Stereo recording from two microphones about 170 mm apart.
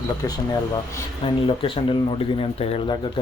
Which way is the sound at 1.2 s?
30° left (ahead or behind).